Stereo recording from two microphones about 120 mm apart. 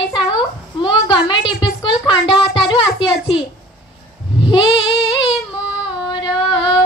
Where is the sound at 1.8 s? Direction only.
40° left (ahead or behind).